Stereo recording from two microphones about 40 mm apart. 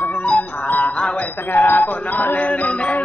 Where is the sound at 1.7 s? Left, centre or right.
Left.